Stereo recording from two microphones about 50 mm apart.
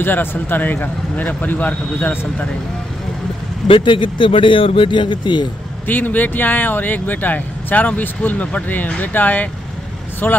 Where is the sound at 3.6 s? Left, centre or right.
Centre.